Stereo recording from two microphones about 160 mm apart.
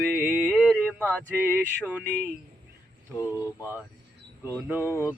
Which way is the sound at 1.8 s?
10° right (ahead or behind).